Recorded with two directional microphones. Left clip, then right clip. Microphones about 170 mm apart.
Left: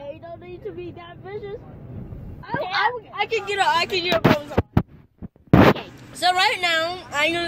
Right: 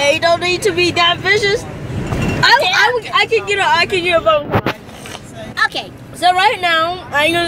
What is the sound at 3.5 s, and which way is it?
Speech, 15° left (ahead or behind).